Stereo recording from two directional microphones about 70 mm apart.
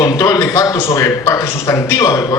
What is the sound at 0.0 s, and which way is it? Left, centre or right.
A man's voice, left.